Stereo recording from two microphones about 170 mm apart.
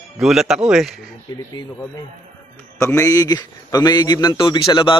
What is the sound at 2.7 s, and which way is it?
A man's voice, 15° left (ahead or behind).